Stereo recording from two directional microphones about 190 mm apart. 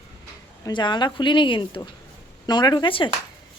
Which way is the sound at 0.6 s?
25° left (ahead or behind).